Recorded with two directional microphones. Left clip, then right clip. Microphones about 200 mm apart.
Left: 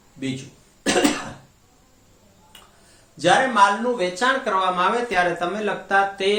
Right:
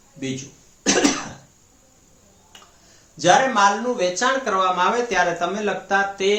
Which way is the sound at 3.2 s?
Centre (ahead or behind).